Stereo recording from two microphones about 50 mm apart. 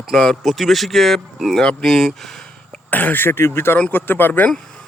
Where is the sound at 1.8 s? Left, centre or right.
Centre.